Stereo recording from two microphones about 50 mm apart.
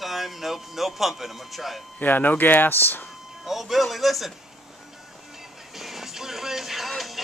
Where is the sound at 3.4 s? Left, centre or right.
Centre.